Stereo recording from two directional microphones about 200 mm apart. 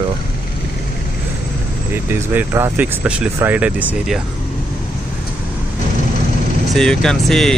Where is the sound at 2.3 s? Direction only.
10° right (ahead or behind).